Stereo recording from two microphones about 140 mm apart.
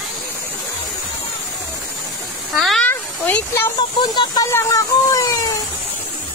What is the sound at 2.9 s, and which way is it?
Snake, 15° left (ahead or behind).